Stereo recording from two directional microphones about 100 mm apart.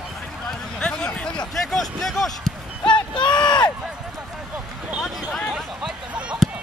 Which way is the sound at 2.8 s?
50° left (ahead or behind).